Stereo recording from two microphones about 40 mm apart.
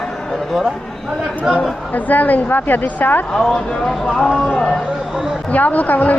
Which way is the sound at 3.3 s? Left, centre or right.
Centre.